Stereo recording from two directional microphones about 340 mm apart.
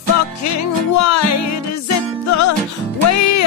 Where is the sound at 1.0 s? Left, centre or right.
Left.